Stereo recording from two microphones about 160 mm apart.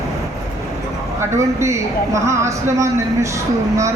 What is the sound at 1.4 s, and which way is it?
A woman's voice, 20° right (ahead or behind).